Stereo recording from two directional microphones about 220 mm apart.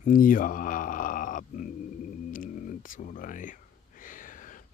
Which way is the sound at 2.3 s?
35° left (ahead or behind).